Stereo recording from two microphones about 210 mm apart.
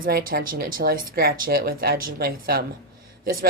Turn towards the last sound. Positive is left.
turn(degrees=-40)  # may be behind; listen again after turning